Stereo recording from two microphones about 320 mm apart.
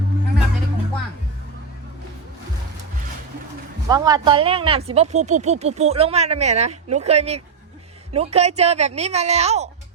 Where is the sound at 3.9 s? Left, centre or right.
Centre.